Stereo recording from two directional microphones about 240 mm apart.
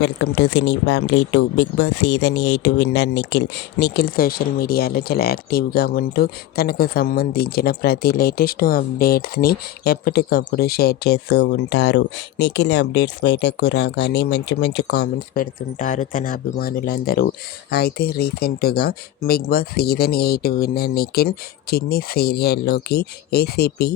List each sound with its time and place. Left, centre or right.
0.0 s speech: left